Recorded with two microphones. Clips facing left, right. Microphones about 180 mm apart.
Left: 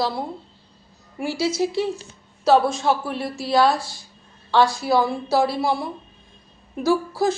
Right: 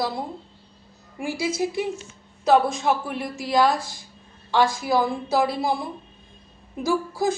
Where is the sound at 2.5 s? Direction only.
15° right (ahead or behind).